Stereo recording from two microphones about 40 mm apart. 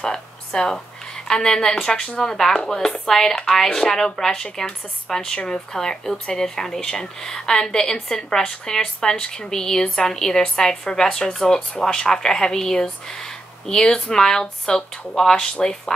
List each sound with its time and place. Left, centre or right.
0.0 s a woman's voice: centre
2.2 s speech: centre